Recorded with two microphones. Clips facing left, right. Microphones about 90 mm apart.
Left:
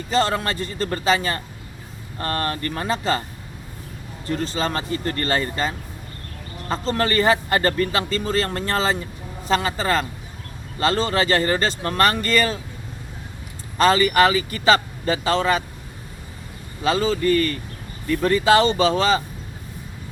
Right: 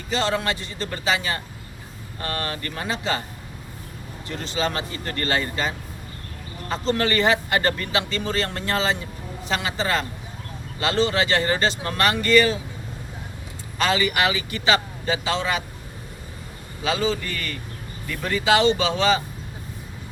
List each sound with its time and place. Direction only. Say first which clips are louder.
0.1 s speech: left 2 dB; 40° left (ahead or behind)
4.3 s speech: left 3 dB; 40° left (ahead or behind)
13.7 s speech: left 6 dB; 40° left (ahead or behind)
16.8 s speech: left 4 dB; 40° left (ahead or behind)